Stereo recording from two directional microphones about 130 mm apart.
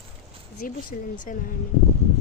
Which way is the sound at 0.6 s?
90° left.